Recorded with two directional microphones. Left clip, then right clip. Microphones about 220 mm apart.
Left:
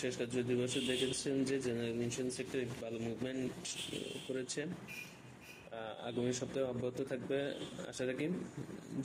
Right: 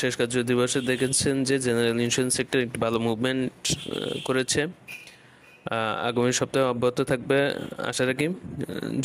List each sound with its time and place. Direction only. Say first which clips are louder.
0.0 s speech: right 13 dB; 50° right (ahead or behind)
5.7 s speech: right 18 dB; 50° right (ahead or behind)